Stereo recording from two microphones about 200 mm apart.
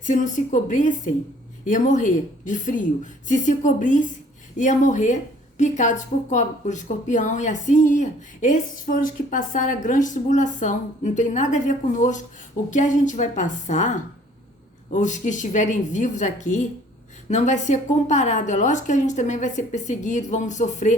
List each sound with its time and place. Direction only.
0.0 s a woman's voice: 40° left (ahead or behind)
14.9 s a woman's voice: 40° left (ahead or behind)